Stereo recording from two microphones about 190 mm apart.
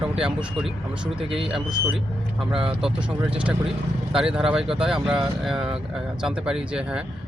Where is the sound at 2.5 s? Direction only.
5° right (ahead or behind).